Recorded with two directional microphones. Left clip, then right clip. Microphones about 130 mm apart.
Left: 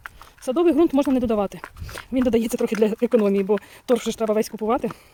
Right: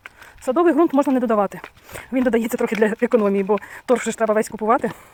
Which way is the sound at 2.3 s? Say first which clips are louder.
Right 1 dB; 35° left (ahead or behind).